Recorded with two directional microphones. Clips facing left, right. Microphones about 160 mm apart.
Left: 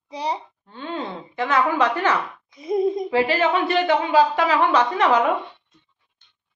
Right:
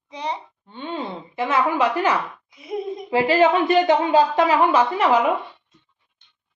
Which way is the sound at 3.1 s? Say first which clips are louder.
Right 3 dB; 15° right (ahead or behind).